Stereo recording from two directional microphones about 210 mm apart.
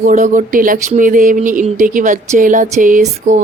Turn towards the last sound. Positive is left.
turn(degrees=-40)  # may be behind; listen again after turning